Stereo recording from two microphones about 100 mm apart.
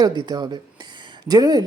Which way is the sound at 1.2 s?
40° right (ahead or behind).